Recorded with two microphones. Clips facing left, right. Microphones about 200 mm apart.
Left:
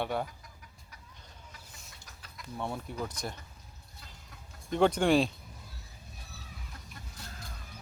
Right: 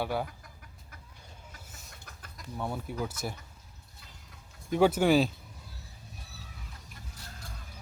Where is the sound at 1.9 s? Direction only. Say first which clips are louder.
Right 3 dB; 55° right (ahead or behind).